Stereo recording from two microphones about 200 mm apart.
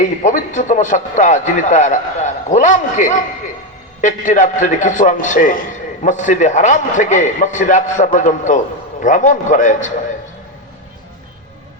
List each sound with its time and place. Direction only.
0.0 s a man's voice: 40° left (ahead or behind)